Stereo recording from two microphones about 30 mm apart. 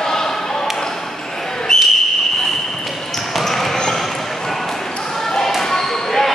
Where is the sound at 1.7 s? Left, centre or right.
Centre.